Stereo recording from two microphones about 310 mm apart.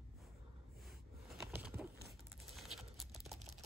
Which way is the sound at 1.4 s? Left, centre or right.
Centre.